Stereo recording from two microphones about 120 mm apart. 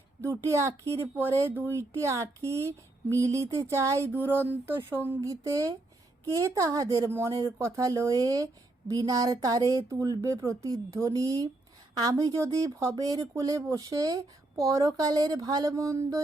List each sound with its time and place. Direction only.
0.2 s speech: 20° right (ahead or behind)